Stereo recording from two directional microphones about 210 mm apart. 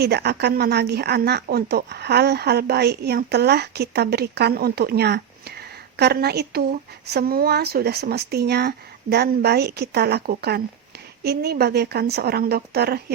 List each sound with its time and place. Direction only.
0.0 s speech: 50° right (ahead or behind)